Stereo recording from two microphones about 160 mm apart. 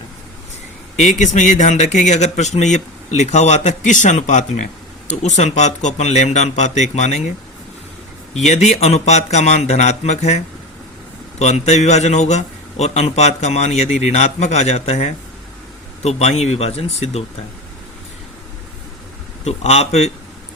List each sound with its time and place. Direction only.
1.0 s a man's voice: 50° left (ahead or behind)
8.4 s a man's voice: 40° left (ahead or behind)
19.5 s speech: 40° left (ahead or behind)